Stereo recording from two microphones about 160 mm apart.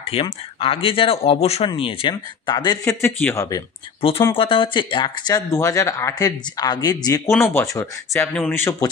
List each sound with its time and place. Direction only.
0.1 s speech: 35° left (ahead or behind)
4.4 s speech: 35° left (ahead or behind)